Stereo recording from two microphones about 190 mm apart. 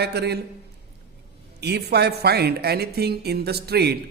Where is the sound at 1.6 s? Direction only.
60° right (ahead or behind).